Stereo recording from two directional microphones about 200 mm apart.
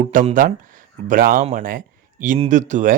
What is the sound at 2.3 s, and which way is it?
Speech, 35° right (ahead or behind).